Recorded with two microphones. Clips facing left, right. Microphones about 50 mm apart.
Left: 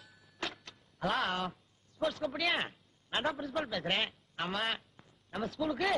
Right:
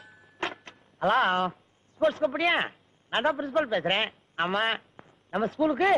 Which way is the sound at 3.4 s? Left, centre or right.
Right.